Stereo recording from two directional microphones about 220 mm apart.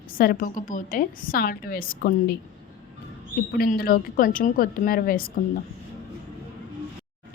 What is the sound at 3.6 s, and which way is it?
A woman's voice, 40° left (ahead or behind).